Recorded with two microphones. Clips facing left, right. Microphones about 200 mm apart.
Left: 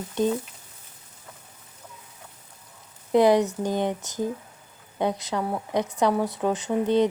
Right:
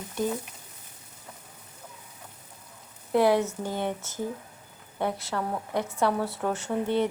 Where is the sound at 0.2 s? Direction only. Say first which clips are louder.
Left 5 dB; 20° left (ahead or behind).